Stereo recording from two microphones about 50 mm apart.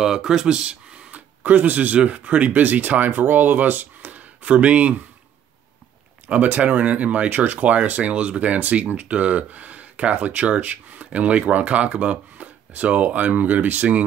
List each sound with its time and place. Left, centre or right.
0.0 s speech: centre; by 4.9 s right
6.2 s speech: right